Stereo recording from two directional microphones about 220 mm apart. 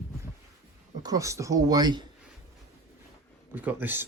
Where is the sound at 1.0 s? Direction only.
15° right (ahead or behind).